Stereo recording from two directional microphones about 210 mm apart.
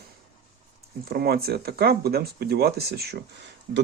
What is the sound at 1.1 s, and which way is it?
Speech, 45° right (ahead or behind).